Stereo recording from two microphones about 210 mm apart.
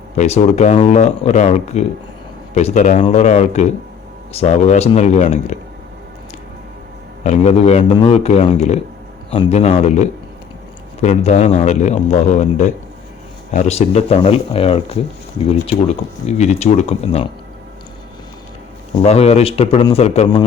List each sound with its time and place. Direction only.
0.2 s a man's voice: 30° left (ahead or behind)
7.3 s a man's voice: 30° left (ahead or behind)
19.0 s speech: 30° left (ahead or behind)